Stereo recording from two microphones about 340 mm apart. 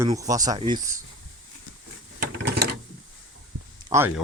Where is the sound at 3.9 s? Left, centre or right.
Centre.